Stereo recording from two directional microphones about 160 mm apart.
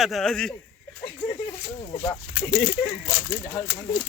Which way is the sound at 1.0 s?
30° left (ahead or behind).